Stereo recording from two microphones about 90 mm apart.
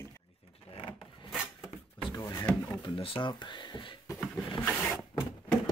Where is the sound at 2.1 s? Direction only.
40° left (ahead or behind).